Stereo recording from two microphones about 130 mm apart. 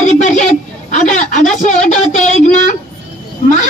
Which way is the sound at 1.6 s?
65° left (ahead or behind).